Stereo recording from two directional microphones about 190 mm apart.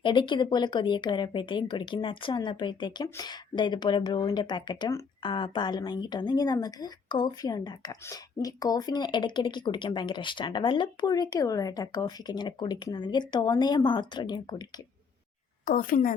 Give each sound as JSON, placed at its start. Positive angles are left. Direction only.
{"t": 0.0, "sound": "speech", "side_deg": 25}
{"t": 15.6, "sound": "speech", "side_deg": 50}